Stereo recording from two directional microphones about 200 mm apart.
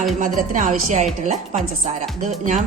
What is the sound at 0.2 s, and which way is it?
Speech, 40° right (ahead or behind).